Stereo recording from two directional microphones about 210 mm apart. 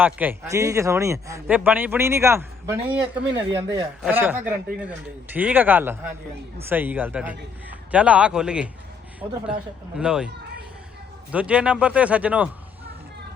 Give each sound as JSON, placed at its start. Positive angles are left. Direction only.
{"t": 0.0, "sound": "a man's voice", "side_deg": -10}
{"t": 10.0, "sound": "speech", "side_deg": -5}
{"t": 11.3, "sound": "speech", "side_deg": -5}